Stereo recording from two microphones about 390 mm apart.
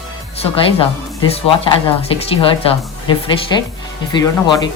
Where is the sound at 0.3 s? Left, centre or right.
Centre.